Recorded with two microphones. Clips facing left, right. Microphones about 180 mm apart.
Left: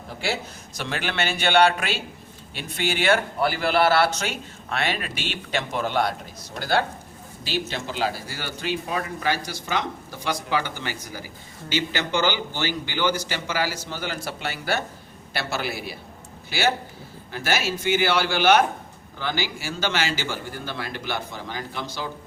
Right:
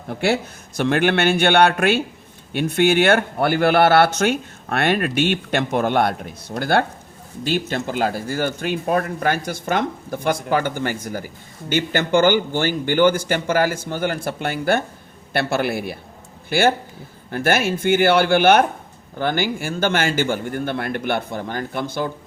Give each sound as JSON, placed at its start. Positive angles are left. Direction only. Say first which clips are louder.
{"t": 0.1, "sound": "speech", "louder": "right 8 dB", "side_deg": -60}